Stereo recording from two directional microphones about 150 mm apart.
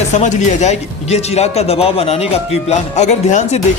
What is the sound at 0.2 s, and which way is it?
A man's voice, 50° left (ahead or behind).